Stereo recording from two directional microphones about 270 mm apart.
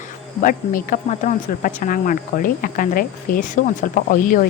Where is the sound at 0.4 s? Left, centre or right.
Left.